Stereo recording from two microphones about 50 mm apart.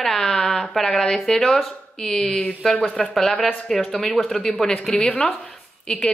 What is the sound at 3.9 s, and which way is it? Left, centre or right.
A woman's voice, centre.